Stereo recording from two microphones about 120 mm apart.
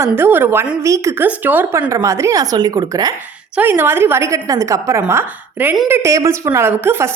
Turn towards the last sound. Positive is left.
turn(degrees=-20)  # may be behind; listen again after turning